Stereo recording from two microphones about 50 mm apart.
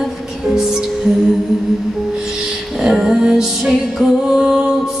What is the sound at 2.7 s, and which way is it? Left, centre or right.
Music, centre.